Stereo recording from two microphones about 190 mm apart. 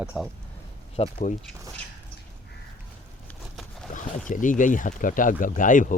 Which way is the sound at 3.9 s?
45° left (ahead or behind).